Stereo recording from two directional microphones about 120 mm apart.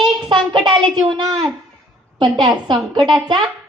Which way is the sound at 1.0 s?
35° right (ahead or behind).